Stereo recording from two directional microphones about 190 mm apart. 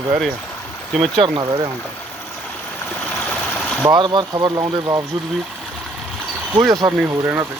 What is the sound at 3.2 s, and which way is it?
Stream, 5° left (ahead or behind).